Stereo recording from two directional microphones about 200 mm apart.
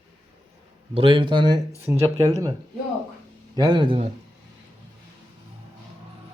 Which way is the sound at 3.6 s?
25° right (ahead or behind).